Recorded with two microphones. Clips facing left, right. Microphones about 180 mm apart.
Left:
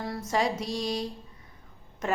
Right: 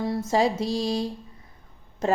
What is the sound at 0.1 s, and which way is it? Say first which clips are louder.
Speech: right 4 dB; 25° right (ahead or behind).